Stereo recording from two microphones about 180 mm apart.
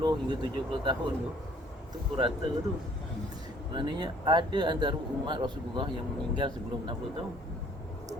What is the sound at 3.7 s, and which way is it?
A man's voice, 25° right (ahead or behind).